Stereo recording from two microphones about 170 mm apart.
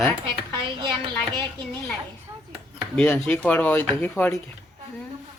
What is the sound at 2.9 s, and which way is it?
A man's voice, 5° left (ahead or behind).